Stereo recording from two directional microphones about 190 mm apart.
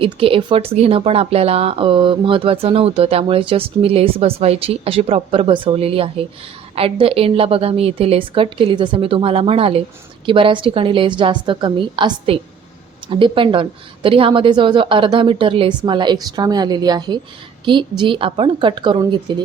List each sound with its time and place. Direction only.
0.0 s speech: 30° right (ahead or behind)